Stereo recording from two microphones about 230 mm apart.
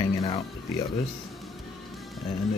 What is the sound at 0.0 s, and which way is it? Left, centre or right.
Music, centre.